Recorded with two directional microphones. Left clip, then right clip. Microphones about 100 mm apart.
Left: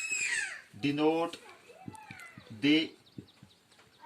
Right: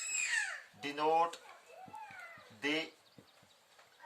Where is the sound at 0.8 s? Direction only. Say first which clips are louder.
Left 3 dB; 50° right (ahead or behind).